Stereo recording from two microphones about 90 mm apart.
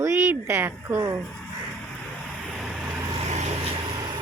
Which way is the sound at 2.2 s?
Centre (ahead or behind).